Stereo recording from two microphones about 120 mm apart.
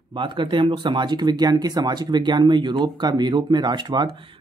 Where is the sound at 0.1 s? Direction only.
40° right (ahead or behind).